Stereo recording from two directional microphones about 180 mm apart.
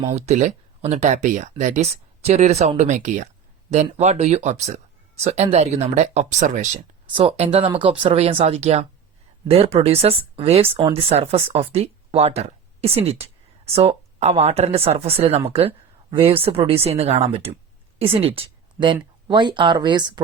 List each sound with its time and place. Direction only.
0.3 s speech: 40° right (ahead or behind)
7.1 s speech: 30° right (ahead or behind)